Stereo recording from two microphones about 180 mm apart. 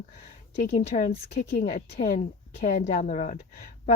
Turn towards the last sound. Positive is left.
turn(degrees=40)  # may be behind; listen again after turning